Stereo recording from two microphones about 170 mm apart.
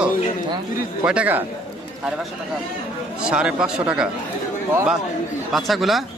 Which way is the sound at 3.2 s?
5° right (ahead or behind).